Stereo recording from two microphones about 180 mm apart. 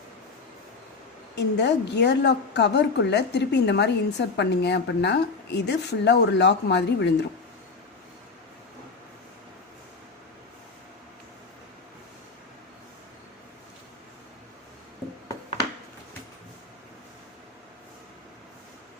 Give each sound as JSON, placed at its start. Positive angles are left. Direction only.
{"t": 1.4, "sound": "a woman's voice", "side_deg": 70}